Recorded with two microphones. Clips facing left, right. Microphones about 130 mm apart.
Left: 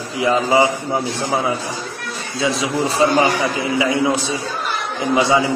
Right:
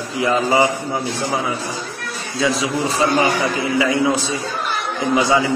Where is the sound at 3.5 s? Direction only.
15° left (ahead or behind).